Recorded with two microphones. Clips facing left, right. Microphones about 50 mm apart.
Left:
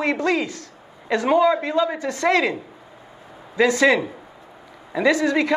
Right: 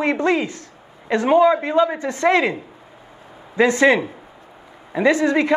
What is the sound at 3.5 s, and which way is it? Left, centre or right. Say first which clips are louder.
Speech: right 2 dB; right.